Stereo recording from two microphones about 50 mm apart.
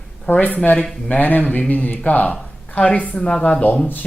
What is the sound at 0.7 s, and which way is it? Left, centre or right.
Speech, centre.